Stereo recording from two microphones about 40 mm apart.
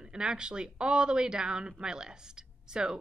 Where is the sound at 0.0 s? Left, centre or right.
Centre.